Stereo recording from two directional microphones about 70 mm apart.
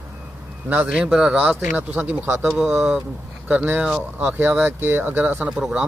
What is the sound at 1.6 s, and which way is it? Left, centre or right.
Speech, right.